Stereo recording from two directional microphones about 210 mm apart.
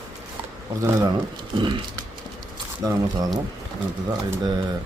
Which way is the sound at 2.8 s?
15° right (ahead or behind).